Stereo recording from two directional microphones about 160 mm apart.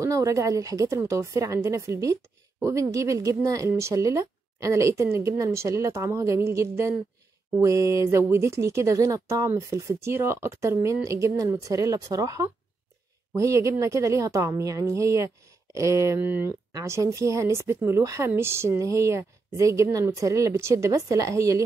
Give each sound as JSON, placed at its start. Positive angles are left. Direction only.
{"t": 0.0, "sound": "speech", "side_deg": -20}